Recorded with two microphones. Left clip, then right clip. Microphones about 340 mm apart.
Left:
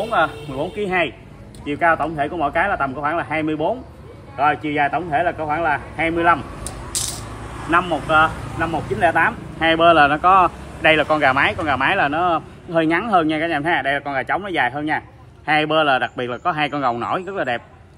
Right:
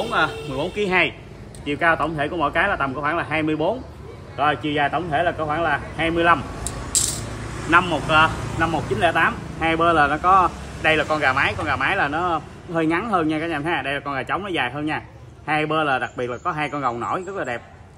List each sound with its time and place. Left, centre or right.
0.1 s speech: centre